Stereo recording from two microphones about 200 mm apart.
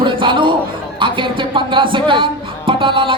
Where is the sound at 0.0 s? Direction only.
25° right (ahead or behind).